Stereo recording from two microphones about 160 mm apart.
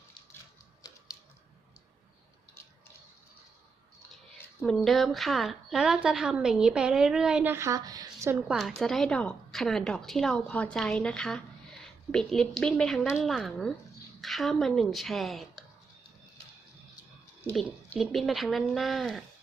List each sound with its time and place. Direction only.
4.6 s a woman's voice: centre (ahead or behind); by 8.4 s 20° right (ahead or behind)
8.4 s a woman's voice: centre (ahead or behind)
17.5 s a woman's voice: centre (ahead or behind)